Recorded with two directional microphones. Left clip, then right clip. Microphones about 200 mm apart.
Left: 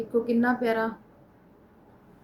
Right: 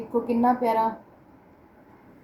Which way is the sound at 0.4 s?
60° left (ahead or behind).